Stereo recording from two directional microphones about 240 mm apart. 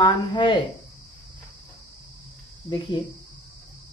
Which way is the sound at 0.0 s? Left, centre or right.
Centre.